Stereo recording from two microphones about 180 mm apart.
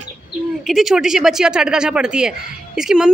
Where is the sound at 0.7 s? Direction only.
Centre (ahead or behind).